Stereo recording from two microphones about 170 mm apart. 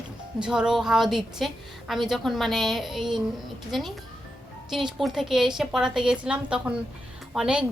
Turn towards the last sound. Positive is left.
turn(degrees=-5)  # may be behind; listen again after turning